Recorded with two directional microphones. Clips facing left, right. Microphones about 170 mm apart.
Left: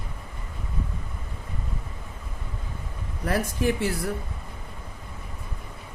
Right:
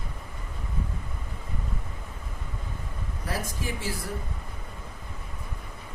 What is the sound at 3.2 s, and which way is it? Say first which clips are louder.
Speech: left 9 dB; 65° left (ahead or behind).